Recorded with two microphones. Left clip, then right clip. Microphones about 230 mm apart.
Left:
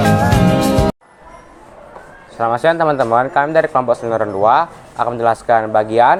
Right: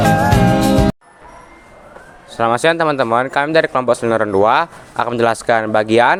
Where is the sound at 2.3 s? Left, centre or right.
Right.